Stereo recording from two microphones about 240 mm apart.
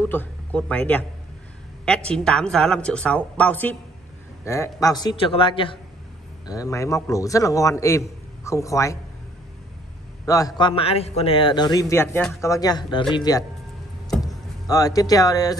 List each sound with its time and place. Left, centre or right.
0.0 s a man's voice: centre
10.2 s a man's voice: centre
14.7 s a man's voice: centre